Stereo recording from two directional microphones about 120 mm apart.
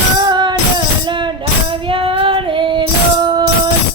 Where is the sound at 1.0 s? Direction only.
40° right (ahead or behind).